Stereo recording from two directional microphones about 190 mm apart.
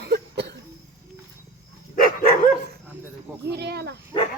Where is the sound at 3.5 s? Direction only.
60° right (ahead or behind).